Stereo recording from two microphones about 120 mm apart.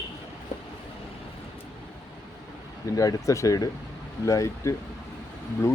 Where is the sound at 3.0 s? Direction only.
30° left (ahead or behind).